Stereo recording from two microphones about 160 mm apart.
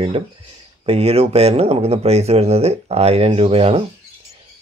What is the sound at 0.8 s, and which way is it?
Speech, 40° right (ahead or behind).